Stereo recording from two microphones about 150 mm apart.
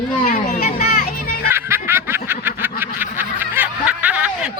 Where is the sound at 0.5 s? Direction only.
85° left.